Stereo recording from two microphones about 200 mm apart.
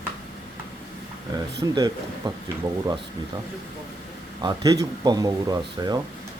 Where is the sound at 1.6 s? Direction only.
20° right (ahead or behind).